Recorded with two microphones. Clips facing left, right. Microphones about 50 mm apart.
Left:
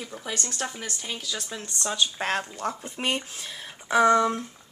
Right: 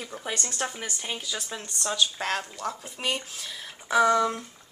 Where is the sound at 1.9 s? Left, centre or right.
Left.